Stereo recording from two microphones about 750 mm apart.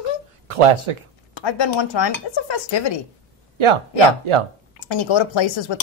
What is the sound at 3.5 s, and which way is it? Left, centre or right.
Speech, right.